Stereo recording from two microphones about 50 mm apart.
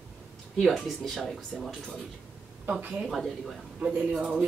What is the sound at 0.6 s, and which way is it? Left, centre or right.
Speech, centre.